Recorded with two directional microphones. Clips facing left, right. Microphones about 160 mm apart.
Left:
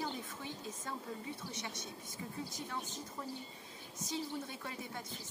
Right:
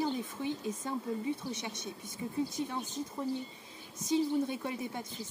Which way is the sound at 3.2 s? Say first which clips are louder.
Right 10 dB; 25° right (ahead or behind).